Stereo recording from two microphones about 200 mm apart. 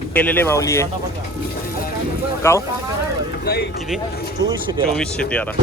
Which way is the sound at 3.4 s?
50° left (ahead or behind).